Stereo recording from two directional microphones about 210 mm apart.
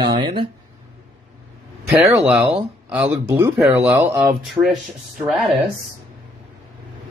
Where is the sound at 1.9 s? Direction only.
Centre (ahead or behind).